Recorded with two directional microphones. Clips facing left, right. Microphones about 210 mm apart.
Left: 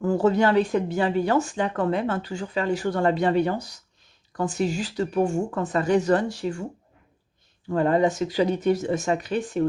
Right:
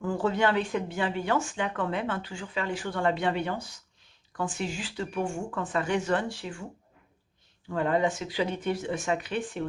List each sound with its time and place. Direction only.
0.0 s speech: 40° left (ahead or behind)
7.7 s speech: 40° left (ahead or behind)